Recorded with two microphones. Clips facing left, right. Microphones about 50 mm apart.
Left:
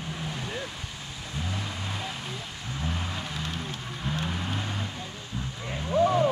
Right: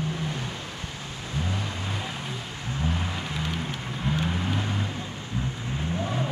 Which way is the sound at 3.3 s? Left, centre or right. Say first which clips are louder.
Right 3 dB; centre.